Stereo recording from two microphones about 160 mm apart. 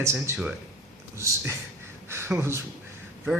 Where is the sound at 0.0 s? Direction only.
15° right (ahead or behind).